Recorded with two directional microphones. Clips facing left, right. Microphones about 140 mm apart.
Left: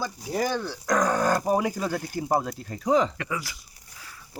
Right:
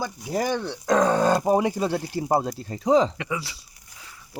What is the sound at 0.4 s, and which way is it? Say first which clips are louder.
Speech: right 3 dB; 20° right (ahead or behind).